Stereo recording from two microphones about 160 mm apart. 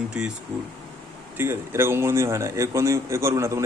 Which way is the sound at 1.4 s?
15° right (ahead or behind).